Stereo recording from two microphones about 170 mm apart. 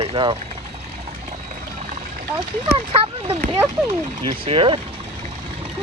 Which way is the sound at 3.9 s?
35° right (ahead or behind).